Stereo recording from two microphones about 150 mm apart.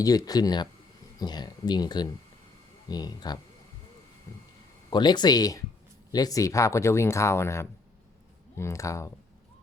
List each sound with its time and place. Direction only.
0.0 s speech: 25° left (ahead or behind)
4.9 s speech: 30° left (ahead or behind)